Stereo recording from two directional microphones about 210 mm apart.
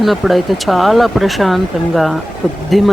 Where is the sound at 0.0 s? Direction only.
Centre (ahead or behind).